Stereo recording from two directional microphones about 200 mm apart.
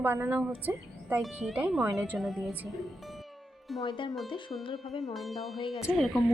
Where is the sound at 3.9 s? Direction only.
25° left (ahead or behind).